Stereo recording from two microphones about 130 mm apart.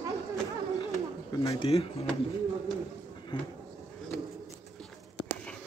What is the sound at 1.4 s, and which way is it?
Speech, 50° left (ahead or behind).